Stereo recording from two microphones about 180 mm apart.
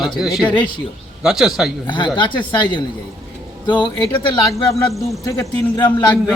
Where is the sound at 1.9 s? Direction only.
25° left (ahead or behind).